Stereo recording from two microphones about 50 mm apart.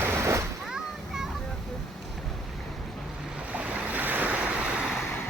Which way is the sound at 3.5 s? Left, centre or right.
Right.